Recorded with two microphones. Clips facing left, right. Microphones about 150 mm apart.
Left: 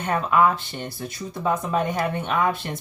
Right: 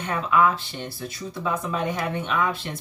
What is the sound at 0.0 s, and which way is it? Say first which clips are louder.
Speech: left 2 dB; 45° left (ahead or behind).